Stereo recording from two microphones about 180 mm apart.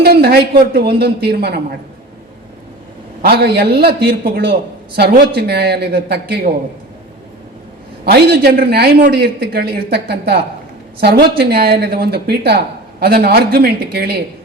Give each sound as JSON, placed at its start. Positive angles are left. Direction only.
{"t": 0.0, "sound": "a sound", "side_deg": -60}
{"t": 0.7, "sound": "speech", "side_deg": -60}
{"t": 3.2, "sound": "speech", "side_deg": -60}
{"t": 8.0, "sound": "speech", "side_deg": -60}